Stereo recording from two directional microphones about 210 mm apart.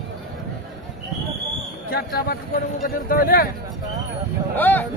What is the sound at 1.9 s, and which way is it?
Basketball bounce, 45° left (ahead or behind).